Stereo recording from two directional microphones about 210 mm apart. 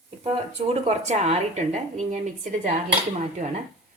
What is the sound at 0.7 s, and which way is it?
Speech, 30° right (ahead or behind).